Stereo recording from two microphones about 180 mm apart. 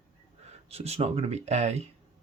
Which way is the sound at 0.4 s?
35° right (ahead or behind).